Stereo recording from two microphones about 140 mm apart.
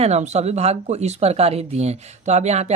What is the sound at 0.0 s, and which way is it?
Speech, 55° right (ahead or behind).